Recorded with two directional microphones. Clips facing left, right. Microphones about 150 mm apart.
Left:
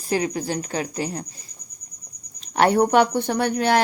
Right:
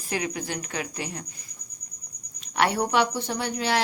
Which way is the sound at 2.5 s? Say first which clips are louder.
Left 6 dB; 40° left (ahead or behind).